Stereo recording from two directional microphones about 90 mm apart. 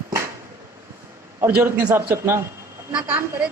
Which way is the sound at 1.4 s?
25° right (ahead or behind).